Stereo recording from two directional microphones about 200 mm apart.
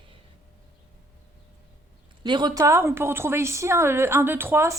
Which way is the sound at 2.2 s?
20° right (ahead or behind).